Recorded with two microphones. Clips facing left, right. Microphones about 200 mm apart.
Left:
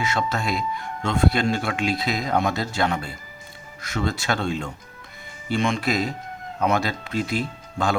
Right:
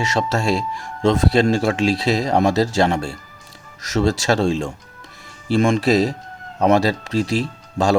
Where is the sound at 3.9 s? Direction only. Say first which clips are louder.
Right 8 dB; 90° right.